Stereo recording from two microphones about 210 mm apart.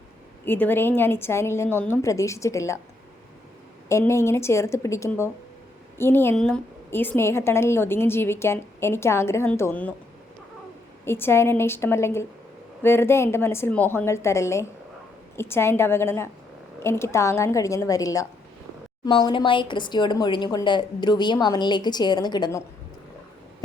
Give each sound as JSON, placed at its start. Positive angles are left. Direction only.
{"t": 0.4, "sound": "a woman's voice", "side_deg": 10}
{"t": 3.8, "sound": "a woman's voice", "side_deg": 15}
{"t": 11.0, "sound": "a woman's voice", "side_deg": 10}